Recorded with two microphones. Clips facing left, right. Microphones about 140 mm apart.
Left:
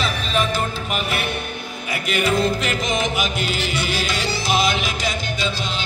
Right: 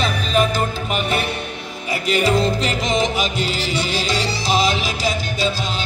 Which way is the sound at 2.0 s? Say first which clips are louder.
Right 2 dB; 30° right (ahead or behind).